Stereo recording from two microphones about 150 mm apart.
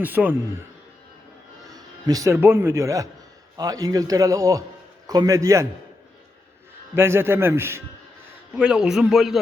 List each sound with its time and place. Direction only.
0.0 s a man's voice: 10° right (ahead or behind)
1.7 s music: 25° right (ahead or behind)
2.3 s a man's voice: 15° right (ahead or behind)
6.9 s a man's voice: 15° right (ahead or behind)
8.5 s a man's voice: 5° right (ahead or behind)